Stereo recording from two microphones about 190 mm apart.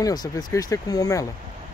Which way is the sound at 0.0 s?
20° left (ahead or behind).